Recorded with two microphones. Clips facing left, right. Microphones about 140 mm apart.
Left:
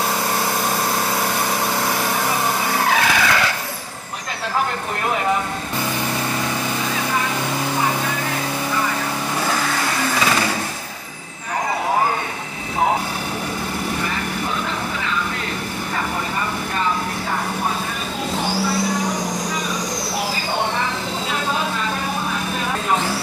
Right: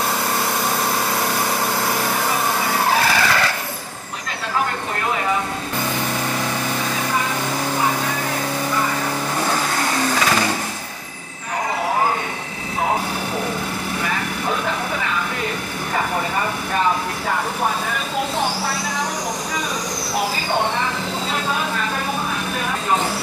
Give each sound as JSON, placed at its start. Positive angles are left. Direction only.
{"t": 2.9, "sound": "skidding", "side_deg": 0}